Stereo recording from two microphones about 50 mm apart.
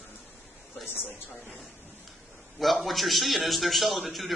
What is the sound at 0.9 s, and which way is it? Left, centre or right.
Speech, left.